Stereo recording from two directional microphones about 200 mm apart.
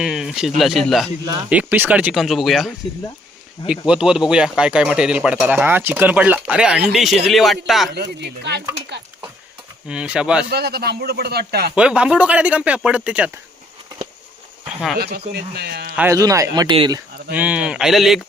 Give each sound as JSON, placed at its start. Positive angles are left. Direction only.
{"t": 0.0, "sound": "speech", "side_deg": 0}
{"t": 7.9, "sound": "speech", "side_deg": -55}
{"t": 9.8, "sound": "speech", "side_deg": -5}
{"t": 10.5, "sound": "speech", "side_deg": -50}
{"t": 11.7, "sound": "speech", "side_deg": -5}
{"t": 14.9, "sound": "speech", "side_deg": -50}
{"t": 16.0, "sound": "speech", "side_deg": -15}
{"t": 17.3, "sound": "speech", "side_deg": -5}